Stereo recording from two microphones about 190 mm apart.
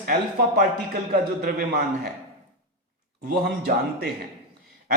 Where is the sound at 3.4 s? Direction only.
55° right (ahead or behind).